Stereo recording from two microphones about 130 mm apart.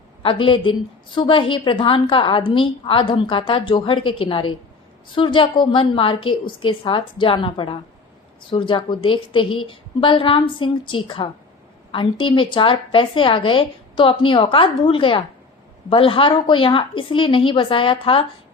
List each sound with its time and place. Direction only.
0.2 s a woman's voice: 40° left (ahead or behind)